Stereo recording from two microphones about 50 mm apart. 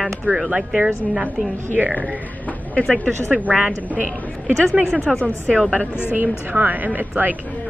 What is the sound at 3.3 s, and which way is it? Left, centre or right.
Speech, right.